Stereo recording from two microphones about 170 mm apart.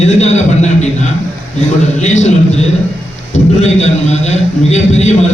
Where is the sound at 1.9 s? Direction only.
45° left (ahead or behind).